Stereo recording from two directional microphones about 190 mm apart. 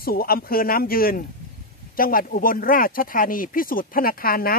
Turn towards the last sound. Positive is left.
turn(degrees=50)  # may be behind; listen again after turning